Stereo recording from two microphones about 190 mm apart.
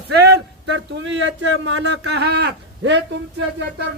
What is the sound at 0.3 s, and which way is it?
Speech, 70° right (ahead or behind).